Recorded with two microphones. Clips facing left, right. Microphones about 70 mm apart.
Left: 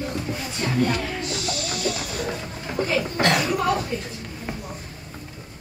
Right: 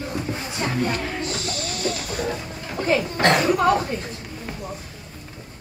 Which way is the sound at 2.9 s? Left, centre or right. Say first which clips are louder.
Right 4 dB; right.